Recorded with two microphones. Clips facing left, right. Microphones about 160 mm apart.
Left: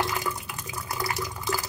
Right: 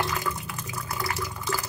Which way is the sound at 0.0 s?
15° left (ahead or behind).